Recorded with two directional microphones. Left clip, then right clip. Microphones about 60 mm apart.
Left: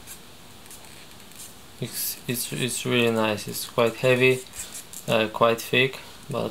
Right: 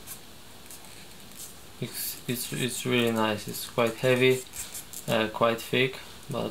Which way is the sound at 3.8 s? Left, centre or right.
Left.